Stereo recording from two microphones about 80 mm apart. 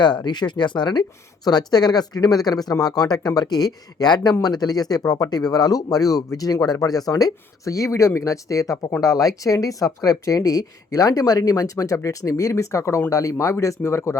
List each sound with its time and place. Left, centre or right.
0.0 s speech: left